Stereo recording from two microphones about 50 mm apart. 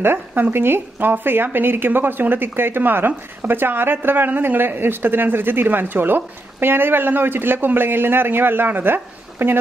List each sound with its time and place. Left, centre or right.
0.4 s speech: right